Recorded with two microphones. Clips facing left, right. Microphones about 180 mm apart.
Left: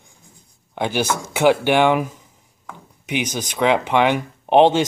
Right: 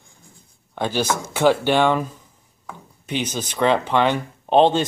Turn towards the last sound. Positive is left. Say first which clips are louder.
# left 2 dB
turn(degrees=15)  # may be behind; listen again after turning